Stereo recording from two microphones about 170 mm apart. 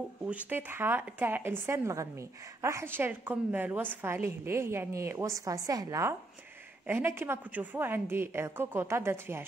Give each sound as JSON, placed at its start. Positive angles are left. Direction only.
{"t": 0.2, "sound": "speech", "side_deg": -10}